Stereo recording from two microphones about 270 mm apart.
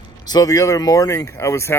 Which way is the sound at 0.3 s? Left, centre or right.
Centre.